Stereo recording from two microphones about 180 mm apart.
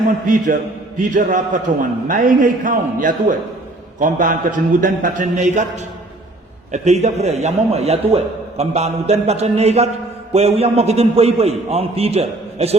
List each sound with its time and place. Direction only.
0.3 s a man's voice: 45° right (ahead or behind)
6.7 s a man's voice: 40° right (ahead or behind)